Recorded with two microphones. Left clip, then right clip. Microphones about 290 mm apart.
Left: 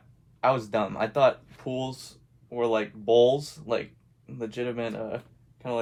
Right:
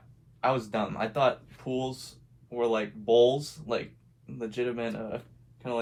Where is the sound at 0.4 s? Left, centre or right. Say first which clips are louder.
Left 3 dB; left.